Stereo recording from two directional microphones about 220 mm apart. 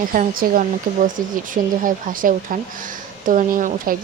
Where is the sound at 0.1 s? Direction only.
40° right (ahead or behind).